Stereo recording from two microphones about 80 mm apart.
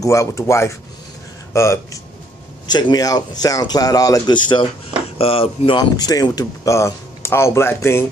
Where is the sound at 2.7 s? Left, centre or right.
Left.